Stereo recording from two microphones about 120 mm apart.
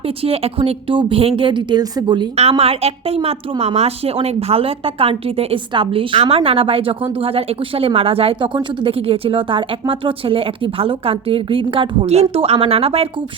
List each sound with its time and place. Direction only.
0.2 s a woman's voice: 55° right (ahead or behind); by 2.2 s 35° right (ahead or behind)
2.3 s a woman's voice: 60° right (ahead or behind)